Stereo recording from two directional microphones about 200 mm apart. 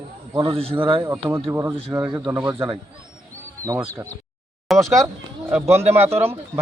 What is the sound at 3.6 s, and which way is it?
Speech, 15° right (ahead or behind).